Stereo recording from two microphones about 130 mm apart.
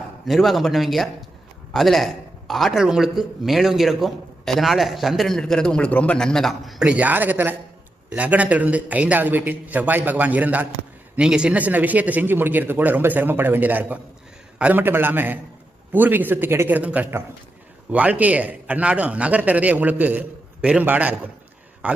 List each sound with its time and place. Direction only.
0.3 s a man's voice: centre (ahead or behind)